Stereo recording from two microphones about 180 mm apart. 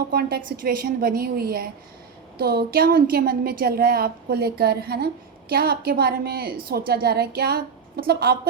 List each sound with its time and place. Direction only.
0.1 s a woman's voice: 60° right (ahead or behind)